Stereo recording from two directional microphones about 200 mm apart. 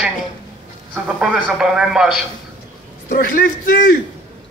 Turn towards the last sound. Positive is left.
turn(degrees=45)  # may be behind; listen again after turning